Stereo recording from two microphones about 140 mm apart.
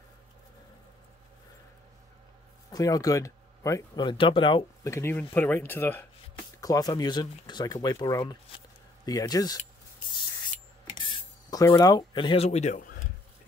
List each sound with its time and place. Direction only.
2.7 s speech: 25° left (ahead or behind)
4.8 s speech: 20° left (ahead or behind)
6.6 s speech: 25° left (ahead or behind)
11.0 s a sound: 35° left (ahead or behind)
11.6 s speech: 25° left (ahead or behind)
12.4 s speech: 55° left (ahead or behind)